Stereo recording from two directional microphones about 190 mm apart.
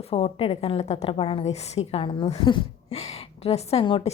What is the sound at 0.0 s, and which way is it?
A woman's voice, 35° left (ahead or behind).